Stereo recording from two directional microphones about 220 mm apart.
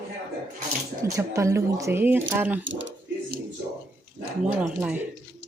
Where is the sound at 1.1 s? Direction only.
15° right (ahead or behind).